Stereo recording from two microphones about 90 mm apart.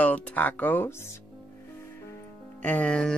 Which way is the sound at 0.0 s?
15° left (ahead or behind).